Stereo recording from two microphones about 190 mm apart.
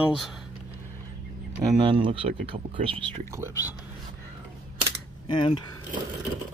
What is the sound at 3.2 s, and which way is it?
Speech, 15° right (ahead or behind).